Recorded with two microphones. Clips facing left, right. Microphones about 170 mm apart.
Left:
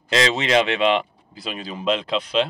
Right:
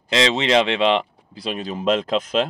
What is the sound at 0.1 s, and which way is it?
Speech, 25° right (ahead or behind).